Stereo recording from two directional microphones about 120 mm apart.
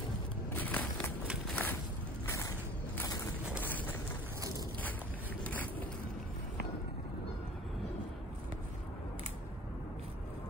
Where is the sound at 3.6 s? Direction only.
15° left (ahead or behind).